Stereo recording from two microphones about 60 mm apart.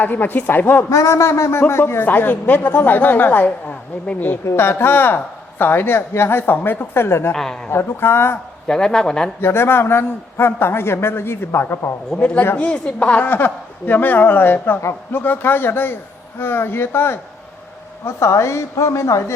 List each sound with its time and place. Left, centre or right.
0.0 s speech: left
0.9 s a sound: left
1.6 s speech: left
2.0 s speech: left
4.4 s a woman's voice: left
8.6 s speech: centre
9.4 s speech: left
12.1 s speech: centre; by 17.2 s left
18.0 s a woman's voice: left